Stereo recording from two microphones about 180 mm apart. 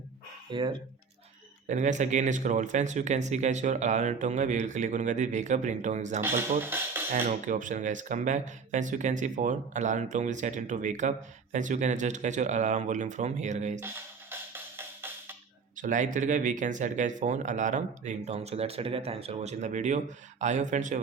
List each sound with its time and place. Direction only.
0.5 s speech: 25° right (ahead or behind)
1.6 s speech: 40° right (ahead or behind)
6.6 s speech: 10° right (ahead or behind)
7.1 s speech: 45° right (ahead or behind)
13.8 s music: 10° right (ahead or behind)
15.7 s speech: 45° right (ahead or behind)